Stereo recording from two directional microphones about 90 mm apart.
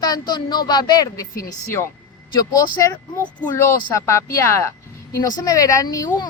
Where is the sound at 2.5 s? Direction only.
40° left (ahead or behind).